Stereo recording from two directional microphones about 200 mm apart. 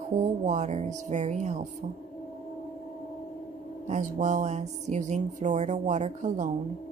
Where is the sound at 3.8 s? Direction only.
35° right (ahead or behind).